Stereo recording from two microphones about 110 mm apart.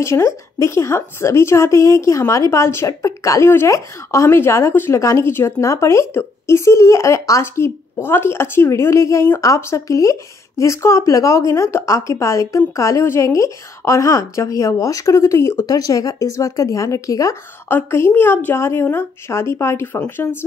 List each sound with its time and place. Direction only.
0.0 s speech: 25° left (ahead or behind)